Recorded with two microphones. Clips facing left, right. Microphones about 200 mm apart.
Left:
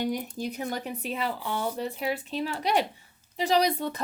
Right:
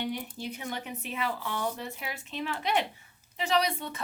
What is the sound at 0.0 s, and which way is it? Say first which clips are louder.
Speech: left 5 dB; 40° left (ahead or behind).